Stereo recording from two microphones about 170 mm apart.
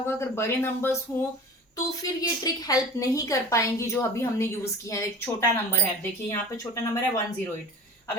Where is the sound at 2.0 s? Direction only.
20° left (ahead or behind).